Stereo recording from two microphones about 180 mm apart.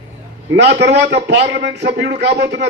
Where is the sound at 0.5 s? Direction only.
70° right (ahead or behind).